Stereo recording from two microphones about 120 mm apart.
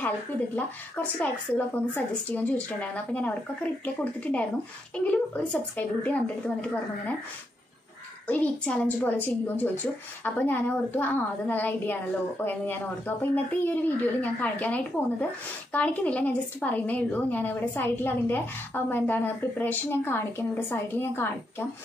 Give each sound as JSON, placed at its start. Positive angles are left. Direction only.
{"t": 0.6, "sound": "a woman's voice", "side_deg": 15}
{"t": 8.3, "sound": "a woman's voice", "side_deg": 10}